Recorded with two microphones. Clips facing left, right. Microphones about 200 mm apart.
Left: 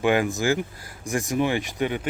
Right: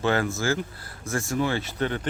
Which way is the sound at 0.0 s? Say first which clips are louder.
Left 3 dB; 15° left (ahead or behind).